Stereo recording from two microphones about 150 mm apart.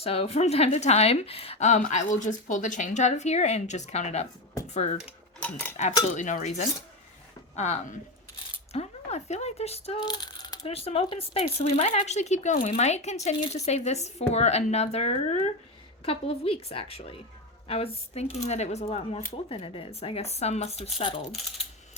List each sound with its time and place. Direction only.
0.0 s speech: 40° left (ahead or behind)
5.4 s speech: 10° left (ahead or behind)
6.1 s speech: 50° left (ahead or behind); by 10.7 s 25° left (ahead or behind)
10.7 s speech: 40° left (ahead or behind)